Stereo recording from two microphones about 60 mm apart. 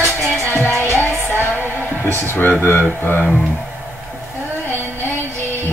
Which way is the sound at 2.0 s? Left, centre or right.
Left.